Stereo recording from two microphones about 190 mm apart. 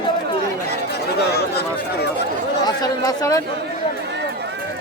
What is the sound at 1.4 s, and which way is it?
Chatter, 60° left (ahead or behind).